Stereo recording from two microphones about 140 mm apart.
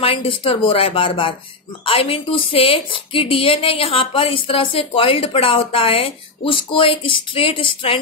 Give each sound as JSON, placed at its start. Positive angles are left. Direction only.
{"t": 0.0, "sound": "a woman's voice", "side_deg": 40}